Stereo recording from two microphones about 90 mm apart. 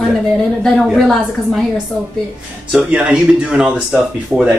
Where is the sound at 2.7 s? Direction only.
10° right (ahead or behind).